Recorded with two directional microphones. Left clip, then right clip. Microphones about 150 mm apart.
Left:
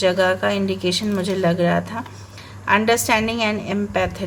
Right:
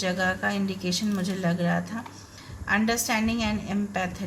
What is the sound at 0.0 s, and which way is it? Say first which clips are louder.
Speech: left 9 dB; 40° left (ahead or behind).